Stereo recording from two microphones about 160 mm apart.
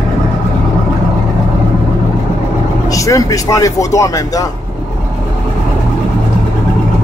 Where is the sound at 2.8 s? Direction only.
20° left (ahead or behind).